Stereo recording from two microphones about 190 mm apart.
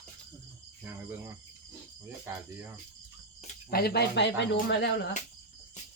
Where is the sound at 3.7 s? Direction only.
55° left (ahead or behind).